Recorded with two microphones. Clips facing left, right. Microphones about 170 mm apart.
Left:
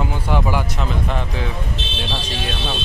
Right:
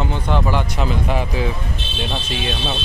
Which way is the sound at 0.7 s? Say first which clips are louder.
Right 3 dB; 5° right (ahead or behind).